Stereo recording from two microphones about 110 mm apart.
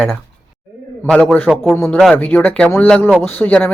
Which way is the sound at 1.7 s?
20° left (ahead or behind).